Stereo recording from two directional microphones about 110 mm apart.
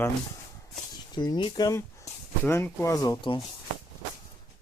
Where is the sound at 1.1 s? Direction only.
40° left (ahead or behind).